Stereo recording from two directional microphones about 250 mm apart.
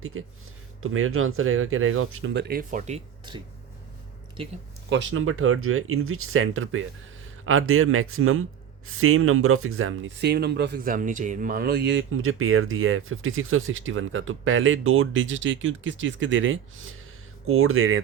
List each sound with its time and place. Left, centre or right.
0.0 s speech: right
4.9 s speech: right